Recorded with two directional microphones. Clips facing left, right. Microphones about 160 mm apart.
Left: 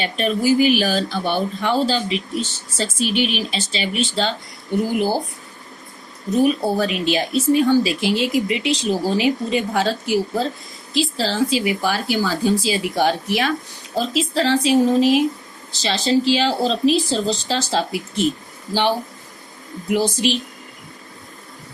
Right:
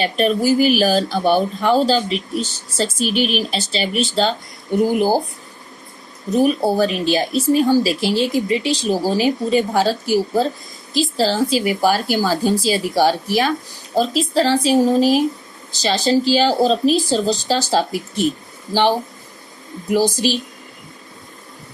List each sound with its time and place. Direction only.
0.0 s speech: 40° right (ahead or behind)
6.3 s speech: 40° right (ahead or behind)